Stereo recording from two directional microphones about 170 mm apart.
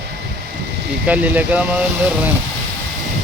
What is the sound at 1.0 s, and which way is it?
Speech, 10° right (ahead or behind).